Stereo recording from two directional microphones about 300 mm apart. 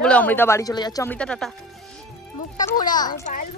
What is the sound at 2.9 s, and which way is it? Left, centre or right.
Speech, left.